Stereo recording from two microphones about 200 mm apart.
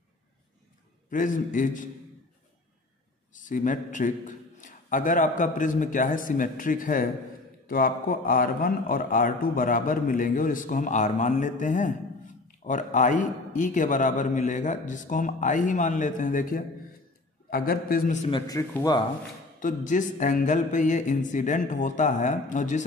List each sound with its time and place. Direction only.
1.1 s a man's voice: 40° left (ahead or behind)
3.3 s a man's voice: 40° left (ahead or behind)
18.3 s speech: 15° left (ahead or behind)
19.6 s a man's voice: 40° left (ahead or behind)